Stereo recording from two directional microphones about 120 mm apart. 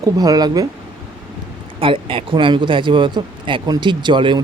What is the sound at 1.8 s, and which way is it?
Speech, 50° right (ahead or behind).